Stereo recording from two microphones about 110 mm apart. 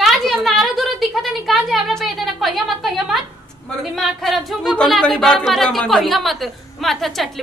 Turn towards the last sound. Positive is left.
turn(degrees=0)  # may be behind; listen again after turning